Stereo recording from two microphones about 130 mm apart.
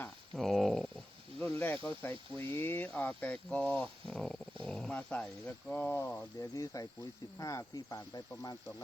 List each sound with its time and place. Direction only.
0.3 s speech: centre (ahead or behind); by 8.5 s 30° left (ahead or behind)